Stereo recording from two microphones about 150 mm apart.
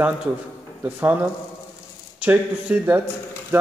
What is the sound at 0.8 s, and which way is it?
Speech, 10° right (ahead or behind).